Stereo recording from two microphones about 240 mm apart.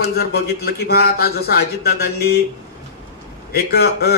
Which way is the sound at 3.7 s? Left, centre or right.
Left.